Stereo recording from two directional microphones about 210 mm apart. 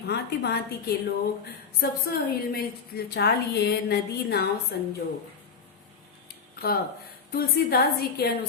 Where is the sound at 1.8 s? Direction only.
50° left (ahead or behind).